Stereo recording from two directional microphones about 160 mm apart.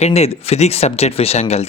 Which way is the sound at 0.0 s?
40° left (ahead or behind).